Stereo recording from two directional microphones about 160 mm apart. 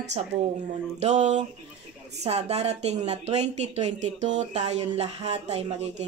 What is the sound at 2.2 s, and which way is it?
A woman's voice, 40° right (ahead or behind).